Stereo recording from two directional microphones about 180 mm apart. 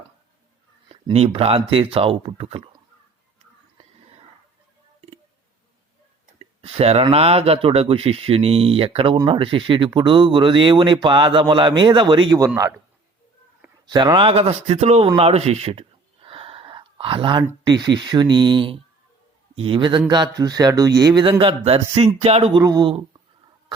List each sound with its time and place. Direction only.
0.9 s speech: 35° right (ahead or behind)
6.4 s speech: 35° right (ahead or behind)
13.8 s speech: 25° right (ahead or behind)